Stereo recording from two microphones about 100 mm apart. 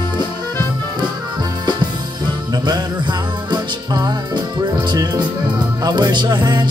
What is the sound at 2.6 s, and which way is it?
Music, 45° right (ahead or behind).